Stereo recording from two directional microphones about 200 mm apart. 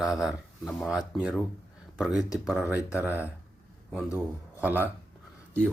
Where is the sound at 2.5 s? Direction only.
10° right (ahead or behind).